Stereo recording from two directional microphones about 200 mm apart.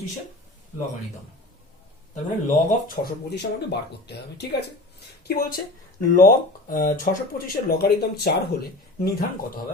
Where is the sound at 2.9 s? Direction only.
50° left (ahead or behind).